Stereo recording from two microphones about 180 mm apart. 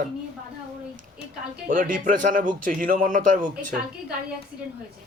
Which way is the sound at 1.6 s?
50° right (ahead or behind).